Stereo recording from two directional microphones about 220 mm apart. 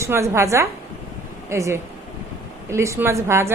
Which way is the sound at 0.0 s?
15° right (ahead or behind).